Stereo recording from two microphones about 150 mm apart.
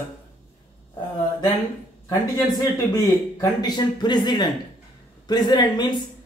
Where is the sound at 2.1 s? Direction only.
25° left (ahead or behind).